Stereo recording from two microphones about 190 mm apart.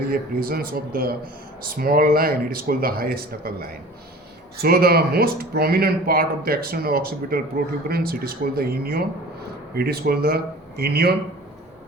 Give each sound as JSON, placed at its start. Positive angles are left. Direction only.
{"t": 0.1, "sound": "speech", "side_deg": -50}